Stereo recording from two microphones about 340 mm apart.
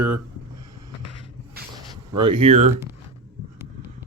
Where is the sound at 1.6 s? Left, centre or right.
Right.